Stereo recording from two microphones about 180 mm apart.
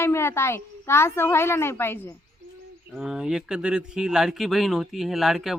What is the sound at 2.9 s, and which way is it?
Speech, 5° right (ahead or behind).